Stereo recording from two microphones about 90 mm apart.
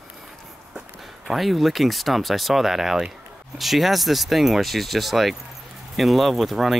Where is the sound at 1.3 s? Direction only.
Centre (ahead or behind).